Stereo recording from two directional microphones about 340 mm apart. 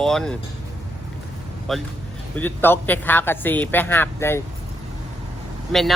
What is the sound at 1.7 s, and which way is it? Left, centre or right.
Speech, centre.